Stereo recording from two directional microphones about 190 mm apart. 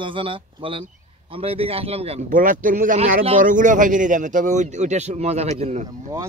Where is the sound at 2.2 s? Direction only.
45° right (ahead or behind).